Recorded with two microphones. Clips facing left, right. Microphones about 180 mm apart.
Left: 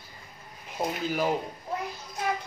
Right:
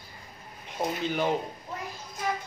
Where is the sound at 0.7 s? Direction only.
5° left (ahead or behind).